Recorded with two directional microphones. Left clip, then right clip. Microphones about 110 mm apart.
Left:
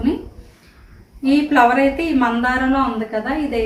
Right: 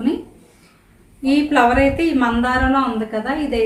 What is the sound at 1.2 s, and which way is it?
A woman's voice, 15° left (ahead or behind).